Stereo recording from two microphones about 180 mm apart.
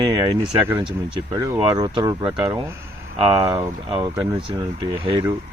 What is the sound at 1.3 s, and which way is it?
Speech, 20° right (ahead or behind).